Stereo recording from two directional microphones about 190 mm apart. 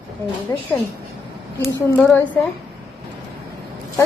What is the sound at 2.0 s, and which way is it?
Speech, 5° left (ahead or behind).